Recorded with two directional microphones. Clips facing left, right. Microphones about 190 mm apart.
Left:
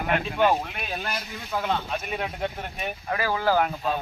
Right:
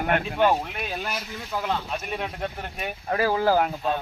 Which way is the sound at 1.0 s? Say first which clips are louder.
Right 1 dB; 5° right (ahead or behind).